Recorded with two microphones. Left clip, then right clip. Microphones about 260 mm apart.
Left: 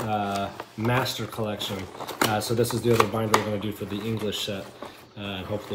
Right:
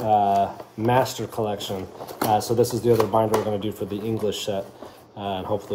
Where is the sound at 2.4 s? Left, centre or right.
Right.